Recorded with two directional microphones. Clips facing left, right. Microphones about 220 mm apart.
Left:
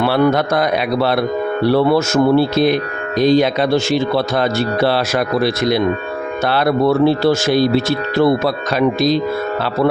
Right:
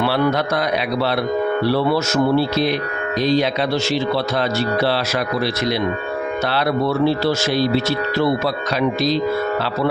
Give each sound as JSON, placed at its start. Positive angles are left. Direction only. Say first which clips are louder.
{"t": 0.0, "sound": "speech", "louder": "left 4 dB", "side_deg": 50}